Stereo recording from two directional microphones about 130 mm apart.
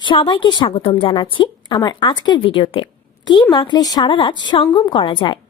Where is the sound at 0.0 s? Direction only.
40° left (ahead or behind).